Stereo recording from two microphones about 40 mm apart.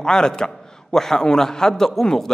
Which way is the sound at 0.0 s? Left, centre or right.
Centre.